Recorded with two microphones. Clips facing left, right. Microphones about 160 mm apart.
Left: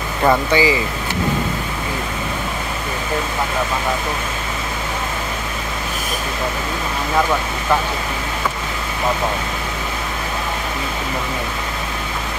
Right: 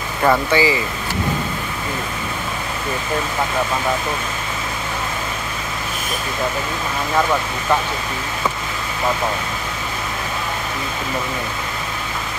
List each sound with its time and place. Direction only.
0.2 s speech: 10° left (ahead or behind)